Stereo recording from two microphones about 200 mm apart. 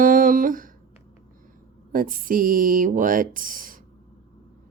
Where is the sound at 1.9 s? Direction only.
45° right (ahead or behind).